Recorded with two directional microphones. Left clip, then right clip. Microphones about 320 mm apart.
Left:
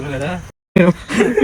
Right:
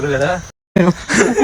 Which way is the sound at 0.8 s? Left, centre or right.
Centre.